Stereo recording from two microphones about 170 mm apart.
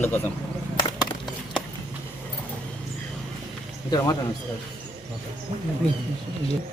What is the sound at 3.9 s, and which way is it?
Speech, 20° left (ahead or behind).